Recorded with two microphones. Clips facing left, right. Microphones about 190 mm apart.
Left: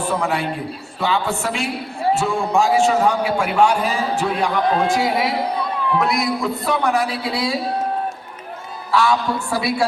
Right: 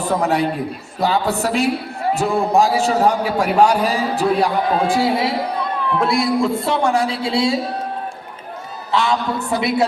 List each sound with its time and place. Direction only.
0.2 s a man's voice: 40° right (ahead or behind)
8.9 s a woman's voice: 20° right (ahead or behind)